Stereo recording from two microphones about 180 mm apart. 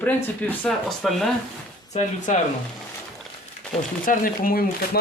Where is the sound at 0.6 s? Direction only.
Centre (ahead or behind).